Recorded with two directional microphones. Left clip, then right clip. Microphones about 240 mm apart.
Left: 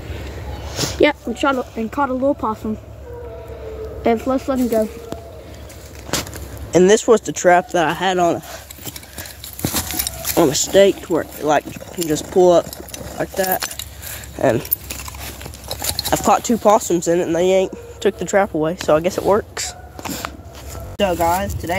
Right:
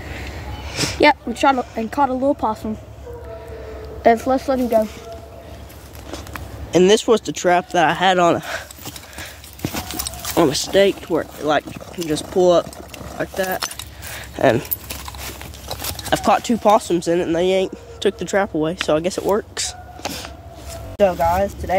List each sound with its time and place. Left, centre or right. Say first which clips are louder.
0.7 s a sound: left 1 dB; centre
1.0 s speech: right 2 dB; right
4.0 s speech: right 3 dB; right
6.7 s speech: left 2 dB; centre; by 8.6 s right
9.6 s a sound: left 3 dB; centre
10.2 s speech: left 1 dB; centre
13.7 s keys jangling: even; centre
16.1 s speech: left 1 dB; centre
18.9 s a sound: left 5 dB; centre
21.0 s speech: right 1 dB; centre